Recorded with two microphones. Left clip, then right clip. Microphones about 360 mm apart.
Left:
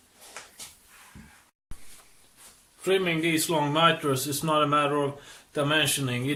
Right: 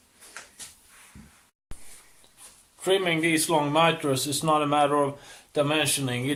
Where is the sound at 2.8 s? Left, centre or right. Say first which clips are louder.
Right 1 dB; centre.